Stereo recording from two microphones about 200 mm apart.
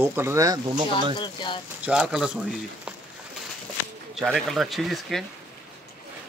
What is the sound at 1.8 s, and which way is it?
Speech, 5° right (ahead or behind).